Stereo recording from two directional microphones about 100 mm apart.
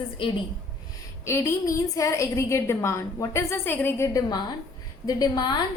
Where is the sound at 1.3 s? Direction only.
30° left (ahead or behind).